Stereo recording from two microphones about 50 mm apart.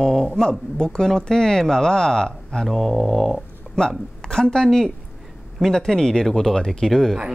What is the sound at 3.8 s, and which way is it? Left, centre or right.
A woman's voice, centre.